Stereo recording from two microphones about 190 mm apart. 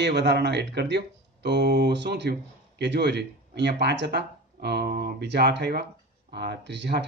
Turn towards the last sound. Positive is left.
turn(degrees=-65)  # may be behind; listen again after turning